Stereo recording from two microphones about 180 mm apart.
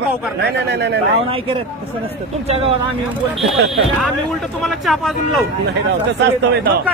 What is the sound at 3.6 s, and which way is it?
Speech, centre (ahead or behind).